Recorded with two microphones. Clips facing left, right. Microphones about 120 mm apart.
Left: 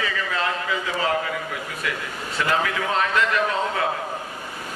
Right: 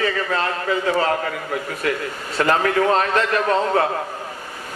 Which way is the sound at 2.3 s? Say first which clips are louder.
Right 6 dB; 45° right (ahead or behind).